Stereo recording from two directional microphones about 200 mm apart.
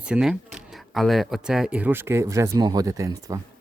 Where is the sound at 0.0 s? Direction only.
5° right (ahead or behind).